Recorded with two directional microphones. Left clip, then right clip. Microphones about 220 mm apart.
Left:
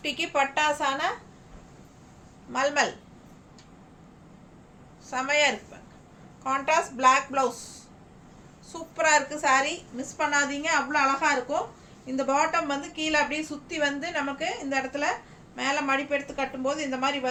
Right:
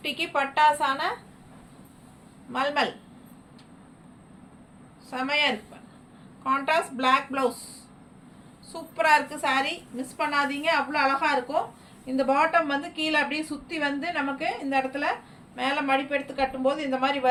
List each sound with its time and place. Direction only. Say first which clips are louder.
0.0 s a woman's voice: left 1 dB; 20° left (ahead or behind)
2.5 s a woman's voice: left 1 dB; 15° left (ahead or behind)
5.1 s a woman's voice: left 1 dB; 15° left (ahead or behind)
8.7 s a woman's voice: right 1 dB; 15° left (ahead or behind)